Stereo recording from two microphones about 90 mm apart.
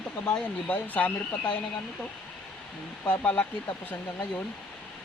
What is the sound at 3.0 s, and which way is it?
Speech, 15° left (ahead or behind).